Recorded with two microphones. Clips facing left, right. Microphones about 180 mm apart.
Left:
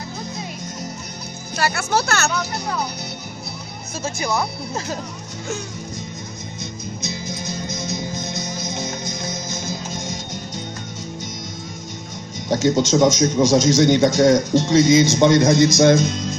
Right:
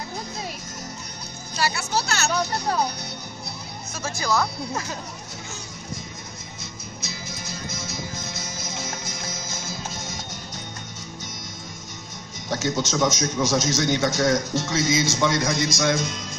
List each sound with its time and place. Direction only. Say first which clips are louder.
1.6 s speech: left 4 dB; 55° left (ahead or behind)
4.0 s speech: left 1 dB; 20° left (ahead or behind)
7.1 s music: left 7 dB; 20° left (ahead or behind)
12.4 s speech: left 8 dB; 15° left (ahead or behind)